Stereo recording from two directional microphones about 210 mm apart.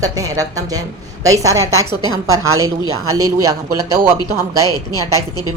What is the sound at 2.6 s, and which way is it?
Speech, 85° right.